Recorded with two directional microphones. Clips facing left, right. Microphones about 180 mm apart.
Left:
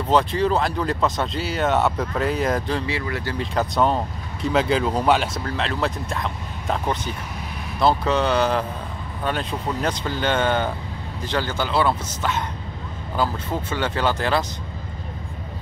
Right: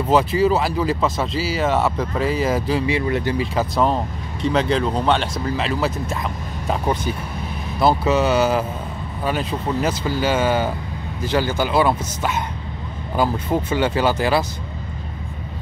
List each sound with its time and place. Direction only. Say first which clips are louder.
0.1 s speech: right 2 dB; 5° right (ahead or behind)
2.9 s speech: right 6 dB; 20° right (ahead or behind)
3.3 s speech: right 2 dB; 5° right (ahead or behind)